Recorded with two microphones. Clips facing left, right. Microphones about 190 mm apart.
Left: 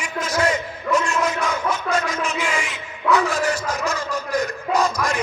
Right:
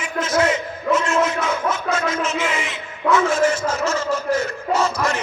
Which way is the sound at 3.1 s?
35° left (ahead or behind).